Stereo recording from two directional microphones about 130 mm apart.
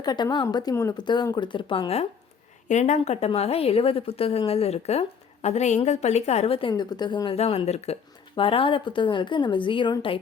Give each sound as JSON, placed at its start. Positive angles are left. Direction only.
{"t": 0.0, "sound": "a woman's voice", "side_deg": 30}
{"t": 2.6, "sound": "a woman's voice", "side_deg": 65}
{"t": 7.3, "sound": "a woman's voice", "side_deg": 50}
{"t": 8.4, "sound": "a woman's voice", "side_deg": 45}